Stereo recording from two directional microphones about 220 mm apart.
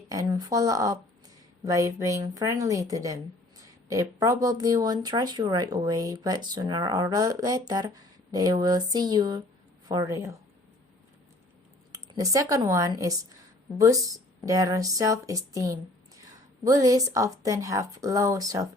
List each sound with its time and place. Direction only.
0.1 s speech: 15° right (ahead or behind)
11.9 s speech: 15° right (ahead or behind)